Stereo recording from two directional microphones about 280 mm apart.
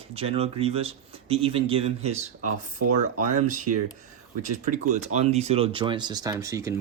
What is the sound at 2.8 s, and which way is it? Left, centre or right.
Speech, right.